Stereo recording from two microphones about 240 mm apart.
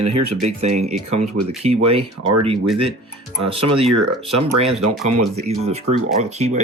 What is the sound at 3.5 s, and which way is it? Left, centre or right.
Speech, right.